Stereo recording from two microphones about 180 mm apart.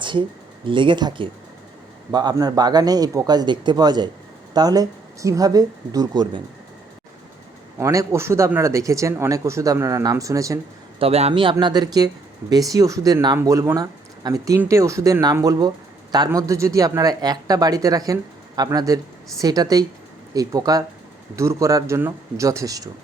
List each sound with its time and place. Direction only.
0.0 s speech: 25° right (ahead or behind)
7.8 s speech: 15° right (ahead or behind)
11.0 s a man's voice: 35° right (ahead or behind); by 22.9 s 20° right (ahead or behind)